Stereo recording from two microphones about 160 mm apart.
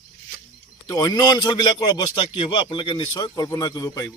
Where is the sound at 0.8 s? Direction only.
25° left (ahead or behind).